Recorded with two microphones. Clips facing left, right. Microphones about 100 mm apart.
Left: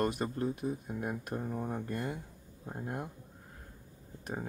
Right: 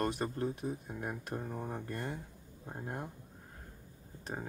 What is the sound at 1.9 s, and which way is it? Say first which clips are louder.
Speech: left 3 dB; 35° right (ahead or behind).